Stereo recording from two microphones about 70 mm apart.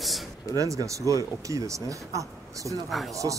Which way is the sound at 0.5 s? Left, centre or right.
Right.